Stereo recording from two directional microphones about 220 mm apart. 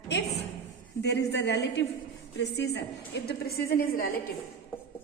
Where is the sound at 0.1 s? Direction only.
50° left (ahead or behind).